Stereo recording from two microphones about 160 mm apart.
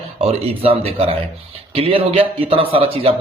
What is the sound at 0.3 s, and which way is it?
Speech, 35° right (ahead or behind).